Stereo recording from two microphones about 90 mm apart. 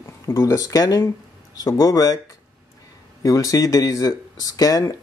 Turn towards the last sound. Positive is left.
turn(degrees=40)  # may be behind; listen again after turning